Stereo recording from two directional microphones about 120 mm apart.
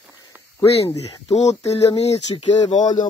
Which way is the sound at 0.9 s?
25° left (ahead or behind).